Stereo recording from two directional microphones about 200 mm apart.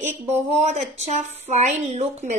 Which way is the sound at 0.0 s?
35° right (ahead or behind).